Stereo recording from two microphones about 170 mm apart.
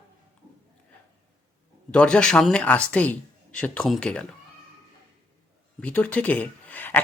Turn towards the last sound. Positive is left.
turn(degrees=10)  # may be behind; listen again after turning